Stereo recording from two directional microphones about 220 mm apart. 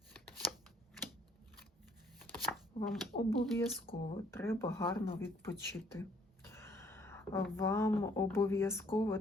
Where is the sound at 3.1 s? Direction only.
35° left (ahead or behind).